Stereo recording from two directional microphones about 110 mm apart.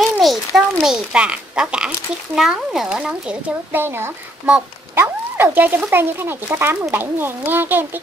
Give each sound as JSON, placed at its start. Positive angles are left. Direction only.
{"t": 0.2, "sound": "a child's voice", "side_deg": 0}